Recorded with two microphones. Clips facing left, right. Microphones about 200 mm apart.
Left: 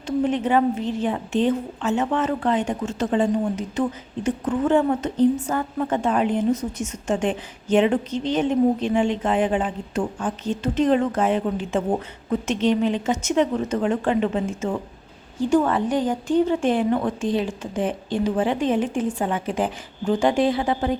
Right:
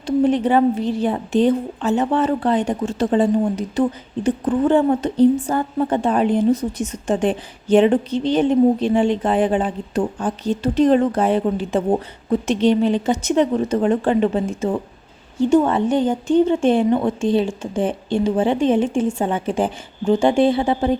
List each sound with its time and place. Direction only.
0.3 s a woman's voice: 35° right (ahead or behind)
15.4 s a woman's voice: 25° right (ahead or behind)